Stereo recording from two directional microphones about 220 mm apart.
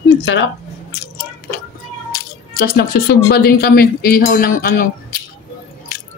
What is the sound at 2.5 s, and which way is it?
Cutlery, 45° left (ahead or behind).